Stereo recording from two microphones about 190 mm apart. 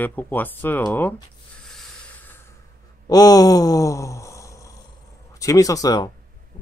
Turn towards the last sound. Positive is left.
turn(degrees=20)  # may be behind; listen again after turning